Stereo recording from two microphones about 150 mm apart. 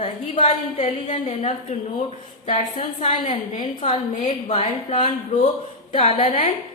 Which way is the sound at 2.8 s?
60° left (ahead or behind).